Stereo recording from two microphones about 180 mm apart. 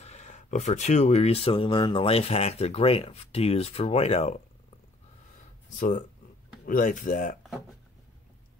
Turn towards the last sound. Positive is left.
turn(degrees=50)  # may be behind; listen again after turning